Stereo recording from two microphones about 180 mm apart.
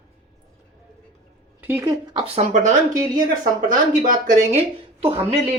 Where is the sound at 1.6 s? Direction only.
15° right (ahead or behind).